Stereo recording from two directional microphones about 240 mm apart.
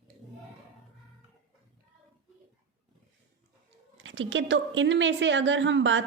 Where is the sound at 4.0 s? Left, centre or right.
Right.